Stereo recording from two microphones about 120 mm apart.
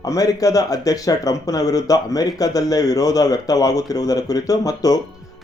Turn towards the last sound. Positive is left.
turn(degrees=30)  # may be behind; listen again after turning